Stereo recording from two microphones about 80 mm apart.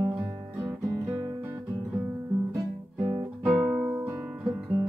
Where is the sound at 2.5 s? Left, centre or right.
Right.